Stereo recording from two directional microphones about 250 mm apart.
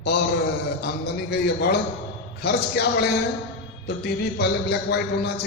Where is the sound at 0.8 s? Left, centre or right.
Left.